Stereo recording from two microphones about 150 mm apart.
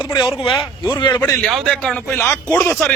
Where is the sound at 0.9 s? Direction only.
30° left (ahead or behind).